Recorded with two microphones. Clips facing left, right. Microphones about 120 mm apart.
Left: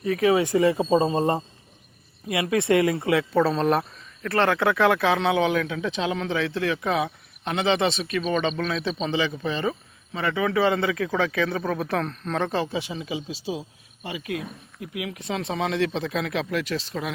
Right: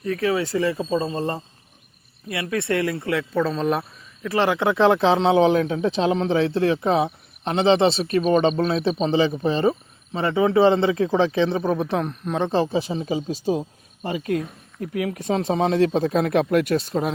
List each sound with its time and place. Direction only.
0.0 s speech: 10° left (ahead or behind)
4.2 s speech: 15° right (ahead or behind)
12.5 s speech: 30° right (ahead or behind); by 16.8 s 55° right (ahead or behind)